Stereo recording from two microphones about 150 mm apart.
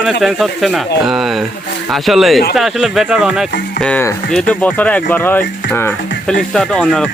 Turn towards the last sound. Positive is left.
turn(degrees=5)  # may be behind; listen again after turning